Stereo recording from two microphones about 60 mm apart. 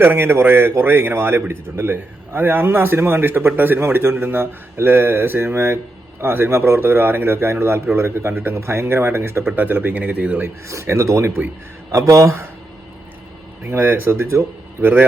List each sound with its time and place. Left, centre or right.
0.0 s a man's voice: right
9.6 s speech: right
10.4 s speech: right
11.9 s speech: right
13.7 s a man's voice: right